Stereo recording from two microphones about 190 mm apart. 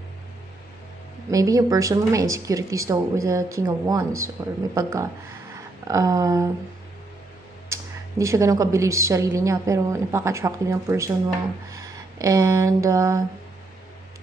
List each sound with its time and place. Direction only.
1.3 s speech: 20° right (ahead or behind)
7.7 s speech: 15° right (ahead or behind)